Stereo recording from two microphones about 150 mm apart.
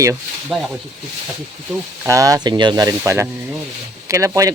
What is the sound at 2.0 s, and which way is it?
Speech, 20° right (ahead or behind).